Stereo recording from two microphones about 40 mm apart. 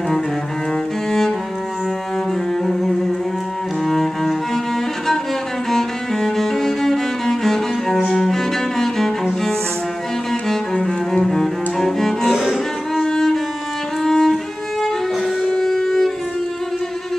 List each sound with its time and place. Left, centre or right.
2.6 s music: centre
3.8 s cello: centre
5.7 s cello: centre
10.5 s cello: centre
12.4 s music: centre
13.0 s music: centre
15.4 s violin: centre